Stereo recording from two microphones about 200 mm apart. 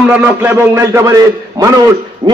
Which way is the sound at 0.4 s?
10° right (ahead or behind).